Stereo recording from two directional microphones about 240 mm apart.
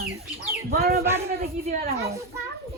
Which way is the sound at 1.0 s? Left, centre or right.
Centre.